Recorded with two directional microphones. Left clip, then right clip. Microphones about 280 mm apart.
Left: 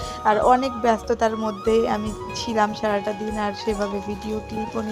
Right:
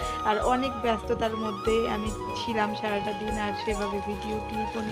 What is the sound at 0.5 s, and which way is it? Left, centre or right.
Speech, centre.